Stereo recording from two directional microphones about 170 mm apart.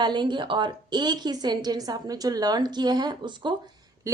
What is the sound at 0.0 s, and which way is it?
A woman's voice, 25° right (ahead or behind).